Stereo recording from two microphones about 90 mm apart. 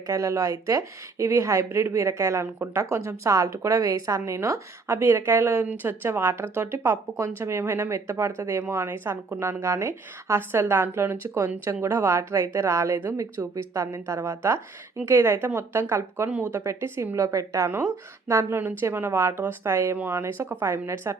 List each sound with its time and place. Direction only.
0.1 s speech: 35° right (ahead or behind)